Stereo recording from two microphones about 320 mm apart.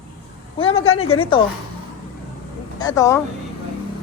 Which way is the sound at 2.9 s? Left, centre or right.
Centre.